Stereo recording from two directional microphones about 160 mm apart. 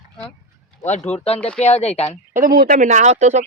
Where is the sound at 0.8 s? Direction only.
45° left (ahead or behind).